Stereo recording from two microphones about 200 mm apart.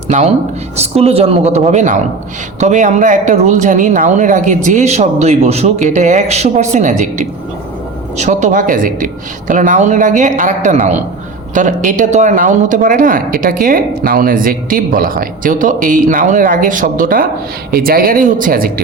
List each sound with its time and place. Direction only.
0.8 s speech: 30° right (ahead or behind)